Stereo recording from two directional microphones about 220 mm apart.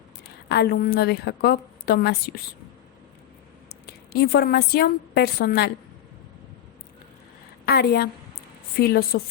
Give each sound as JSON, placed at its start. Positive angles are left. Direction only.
{"t": 0.4, "sound": "a woman's voice", "side_deg": 45}
{"t": 3.8, "sound": "a woman's voice", "side_deg": 45}
{"t": 7.6, "sound": "a woman's voice", "side_deg": 50}